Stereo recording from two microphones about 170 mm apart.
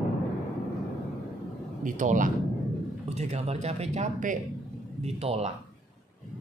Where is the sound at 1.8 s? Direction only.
50° right (ahead or behind).